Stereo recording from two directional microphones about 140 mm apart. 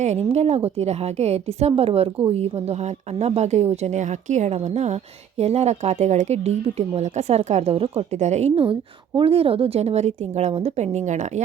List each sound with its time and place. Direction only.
0.0 s speech: 50° right (ahead or behind)